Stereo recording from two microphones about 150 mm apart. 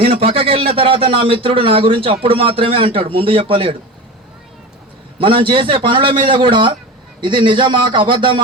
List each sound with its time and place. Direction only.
0.0 s speech: 40° right (ahead or behind)
5.2 s speech: 35° right (ahead or behind)